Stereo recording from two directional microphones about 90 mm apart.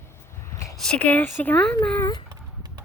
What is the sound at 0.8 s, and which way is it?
Speech, 10° left (ahead or behind).